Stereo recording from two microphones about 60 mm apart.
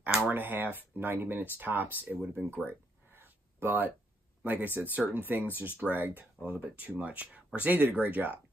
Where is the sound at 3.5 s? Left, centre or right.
Right.